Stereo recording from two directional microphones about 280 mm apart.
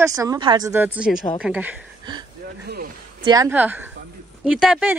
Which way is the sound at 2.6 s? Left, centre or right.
Right.